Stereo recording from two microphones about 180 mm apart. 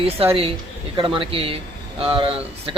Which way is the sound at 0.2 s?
30° right (ahead or behind).